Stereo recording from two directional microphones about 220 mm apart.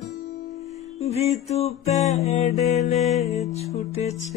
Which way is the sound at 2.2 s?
30° left (ahead or behind).